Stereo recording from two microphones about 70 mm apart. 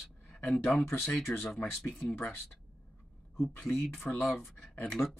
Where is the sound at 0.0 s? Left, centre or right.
Centre.